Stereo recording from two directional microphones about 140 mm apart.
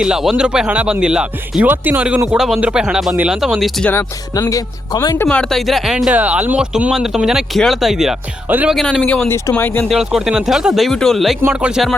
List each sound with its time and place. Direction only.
0.0 s speech: 5° right (ahead or behind)
4.4 s speech: 25° left (ahead or behind)
5.4 s speech: centre (ahead or behind)
8.4 s speech: 15° right (ahead or behind)
8.7 s speech: 5° left (ahead or behind)
9.9 s speech: 5° right (ahead or behind)